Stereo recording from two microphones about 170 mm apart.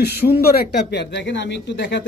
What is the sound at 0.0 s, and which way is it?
Speech, 70° left (ahead or behind).